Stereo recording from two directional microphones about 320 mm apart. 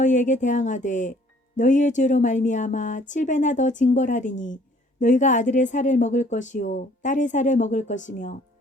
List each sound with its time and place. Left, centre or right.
0.0 s a woman's voice: left